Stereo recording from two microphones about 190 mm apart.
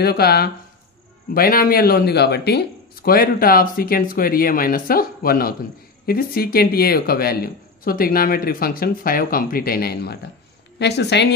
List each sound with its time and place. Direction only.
0.0 s a woman's voice: 55° left (ahead or behind)